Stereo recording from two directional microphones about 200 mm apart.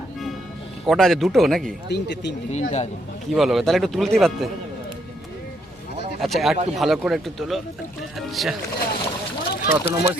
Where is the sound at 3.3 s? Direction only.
Centre (ahead or behind).